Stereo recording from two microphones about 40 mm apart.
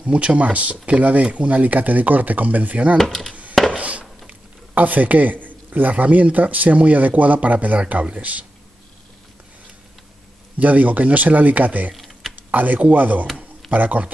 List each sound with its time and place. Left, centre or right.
0.0 s speech: right
3.0 s speech: centre
3.7 s a sound: right
4.3 s speech: right
10.6 s speech: right
11.9 s typing: centre
12.4 s speech: right